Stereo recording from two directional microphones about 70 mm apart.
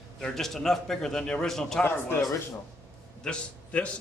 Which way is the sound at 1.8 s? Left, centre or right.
Left.